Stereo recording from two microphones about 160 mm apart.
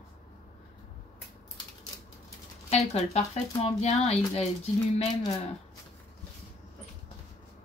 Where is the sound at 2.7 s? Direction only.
40° left (ahead or behind).